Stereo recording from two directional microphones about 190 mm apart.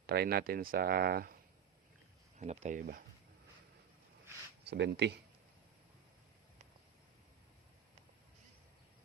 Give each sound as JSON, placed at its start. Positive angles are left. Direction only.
{"t": 0.1, "sound": "speech", "side_deg": -55}
{"t": 2.4, "sound": "speech", "side_deg": -35}
{"t": 4.6, "sound": "speech", "side_deg": -60}